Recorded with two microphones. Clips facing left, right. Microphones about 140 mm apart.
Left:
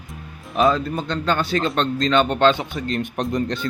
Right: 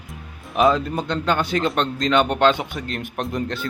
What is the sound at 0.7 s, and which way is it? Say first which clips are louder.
Speech: right 1 dB; 20° right (ahead or behind).